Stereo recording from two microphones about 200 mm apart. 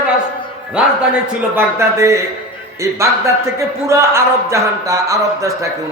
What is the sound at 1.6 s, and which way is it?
Speech, 15° right (ahead or behind).